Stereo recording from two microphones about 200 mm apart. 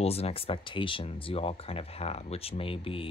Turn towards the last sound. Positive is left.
turn(degrees=25)  # may be behind; listen again after turning